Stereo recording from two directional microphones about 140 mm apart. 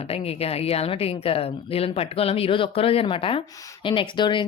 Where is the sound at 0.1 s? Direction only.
45° left (ahead or behind).